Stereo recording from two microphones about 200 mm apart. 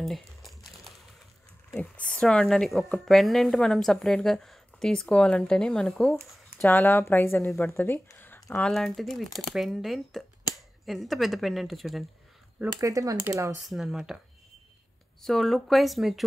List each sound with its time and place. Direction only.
0.0 s typing: centre (ahead or behind)
1.7 s speech: 5° left (ahead or behind)
12.8 s speech: 15° right (ahead or behind)
13.7 s speech: centre (ahead or behind)
15.2 s speech: centre (ahead or behind)